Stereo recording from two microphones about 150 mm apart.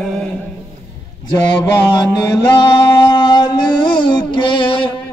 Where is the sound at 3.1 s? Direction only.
30° left (ahead or behind).